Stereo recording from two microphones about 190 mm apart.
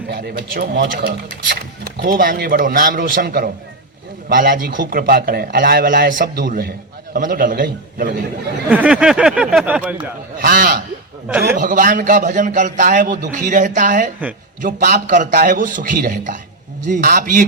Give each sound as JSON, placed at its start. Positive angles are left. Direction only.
{"t": 0.1, "sound": "a man's voice", "side_deg": -55}
{"t": 8.7, "sound": "speech", "side_deg": -5}
{"t": 10.3, "sound": "a man's voice", "side_deg": -50}